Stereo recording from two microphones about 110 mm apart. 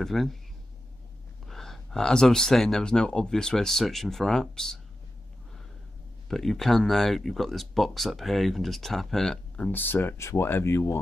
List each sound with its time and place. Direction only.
0.0 s speech: centre (ahead or behind)
1.4 s speech: centre (ahead or behind)
6.2 s speech: centre (ahead or behind)
9.7 s speech: 15° left (ahead or behind)